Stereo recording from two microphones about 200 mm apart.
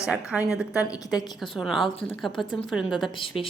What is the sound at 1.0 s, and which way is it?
Speech, 20° left (ahead or behind).